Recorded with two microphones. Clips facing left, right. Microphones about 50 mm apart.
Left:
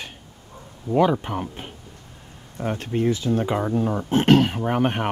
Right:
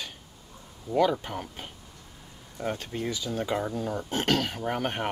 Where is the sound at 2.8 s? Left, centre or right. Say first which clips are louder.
Left 10 dB; left.